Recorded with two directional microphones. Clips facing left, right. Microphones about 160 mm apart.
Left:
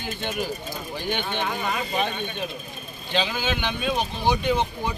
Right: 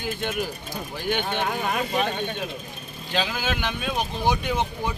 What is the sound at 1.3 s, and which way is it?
Speech, 50° right (ahead or behind).